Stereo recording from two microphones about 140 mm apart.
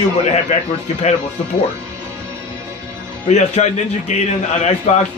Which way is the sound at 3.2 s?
55° left (ahead or behind).